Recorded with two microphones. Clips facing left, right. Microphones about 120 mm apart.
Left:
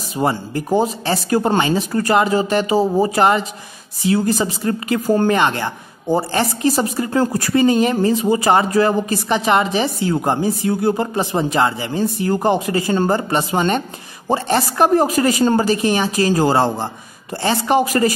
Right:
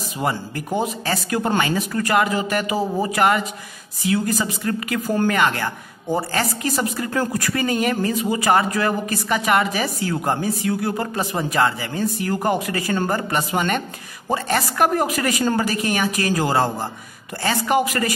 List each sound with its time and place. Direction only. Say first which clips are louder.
0.2 s speech: left 5 dB; 30° left (ahead or behind)